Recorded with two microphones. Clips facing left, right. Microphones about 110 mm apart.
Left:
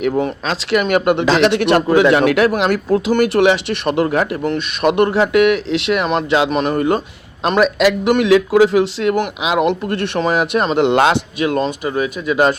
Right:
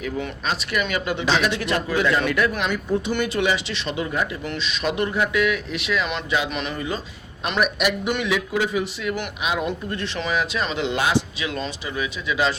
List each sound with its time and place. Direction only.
0.0 s speech: 65° left (ahead or behind)
4.5 s speech: 60° left (ahead or behind)
7.6 s a man's voice: 90° left; by 12.5 s 50° left (ahead or behind)